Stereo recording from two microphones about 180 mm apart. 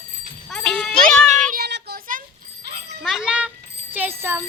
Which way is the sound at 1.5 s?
60° right (ahead or behind).